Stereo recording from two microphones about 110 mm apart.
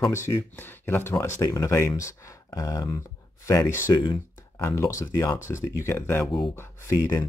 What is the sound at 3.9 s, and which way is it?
Speech, 40° left (ahead or behind).